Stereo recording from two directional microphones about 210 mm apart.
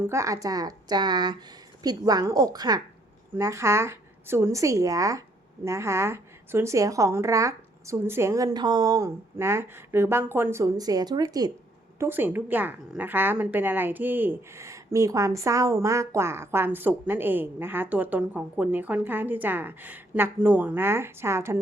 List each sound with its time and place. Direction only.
0.0 s a woman's voice: 15° right (ahead or behind)